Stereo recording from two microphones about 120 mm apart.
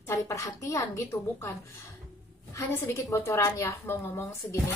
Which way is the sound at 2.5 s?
25° left (ahead or behind).